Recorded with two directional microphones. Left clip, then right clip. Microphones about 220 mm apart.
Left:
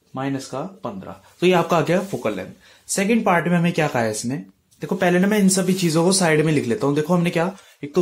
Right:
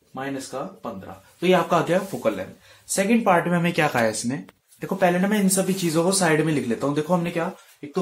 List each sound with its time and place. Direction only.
0.1 s speech: 40° left (ahead or behind); by 7.2 s 25° left (ahead or behind)
7.8 s speech: 50° left (ahead or behind)